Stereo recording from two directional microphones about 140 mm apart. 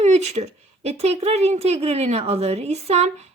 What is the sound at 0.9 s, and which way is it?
A woman's voice, 50° right (ahead or behind).